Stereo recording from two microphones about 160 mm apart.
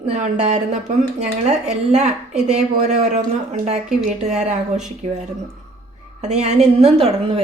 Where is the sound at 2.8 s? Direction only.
45° right (ahead or behind).